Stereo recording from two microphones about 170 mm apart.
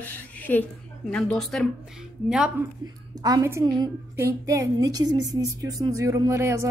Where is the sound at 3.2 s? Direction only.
20° right (ahead or behind).